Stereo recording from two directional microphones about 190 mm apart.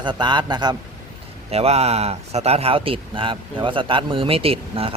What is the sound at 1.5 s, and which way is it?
A man's voice, 35° right (ahead or behind).